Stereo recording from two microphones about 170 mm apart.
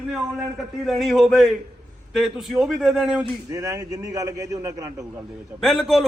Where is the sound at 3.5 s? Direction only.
20° right (ahead or behind).